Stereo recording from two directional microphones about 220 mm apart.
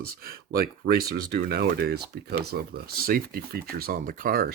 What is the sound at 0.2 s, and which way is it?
Speech, 40° right (ahead or behind).